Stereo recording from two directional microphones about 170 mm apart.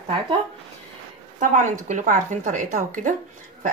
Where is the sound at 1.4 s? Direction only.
50° right (ahead or behind).